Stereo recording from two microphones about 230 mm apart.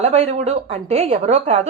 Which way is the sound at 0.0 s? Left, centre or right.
Right.